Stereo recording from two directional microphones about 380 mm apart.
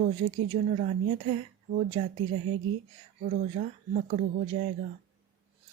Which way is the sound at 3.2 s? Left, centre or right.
Centre.